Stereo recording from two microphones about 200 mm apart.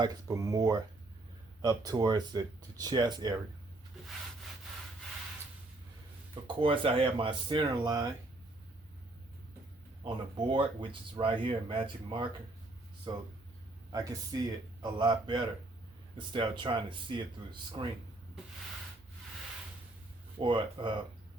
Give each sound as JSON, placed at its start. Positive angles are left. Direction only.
{"t": 0.0, "sound": "speech", "side_deg": -20}
{"t": 6.6, "sound": "speech", "side_deg": -25}
{"t": 10.0, "sound": "speech", "side_deg": -25}
{"t": 13.9, "sound": "speech", "side_deg": -20}
{"t": 20.4, "sound": "speech", "side_deg": -25}